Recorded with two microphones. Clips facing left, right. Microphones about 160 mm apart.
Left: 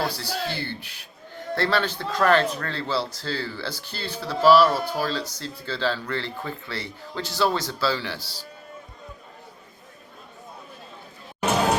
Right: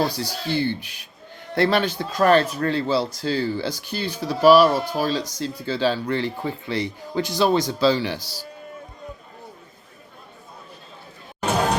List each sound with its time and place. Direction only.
0.0 s speech: 15° right (ahead or behind)